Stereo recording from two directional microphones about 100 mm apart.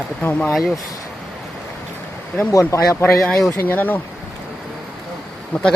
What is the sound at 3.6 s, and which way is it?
Speech, 20° left (ahead or behind).